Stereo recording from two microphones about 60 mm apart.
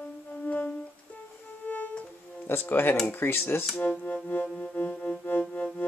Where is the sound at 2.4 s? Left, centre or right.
Left.